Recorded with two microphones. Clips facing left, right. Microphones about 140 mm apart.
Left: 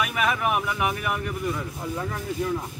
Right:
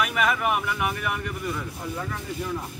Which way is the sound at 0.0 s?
5° left (ahead or behind).